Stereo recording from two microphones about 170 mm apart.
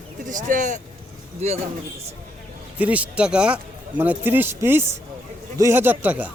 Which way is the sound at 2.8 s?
10° right (ahead or behind).